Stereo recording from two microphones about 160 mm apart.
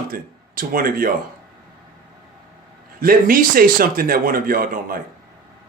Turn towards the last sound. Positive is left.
turn(degrees=-60)  # may be behind; listen again after turning